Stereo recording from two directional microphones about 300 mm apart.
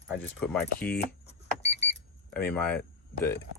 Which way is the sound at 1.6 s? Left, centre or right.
Left.